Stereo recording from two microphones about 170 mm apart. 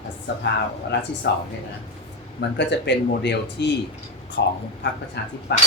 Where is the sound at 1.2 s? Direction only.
80° left.